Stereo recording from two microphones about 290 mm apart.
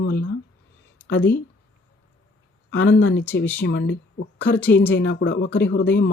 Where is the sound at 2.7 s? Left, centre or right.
Left.